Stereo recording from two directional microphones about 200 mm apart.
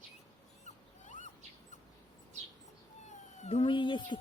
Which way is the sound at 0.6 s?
35° left (ahead or behind).